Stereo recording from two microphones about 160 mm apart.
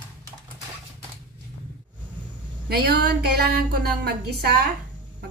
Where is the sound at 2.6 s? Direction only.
85° right.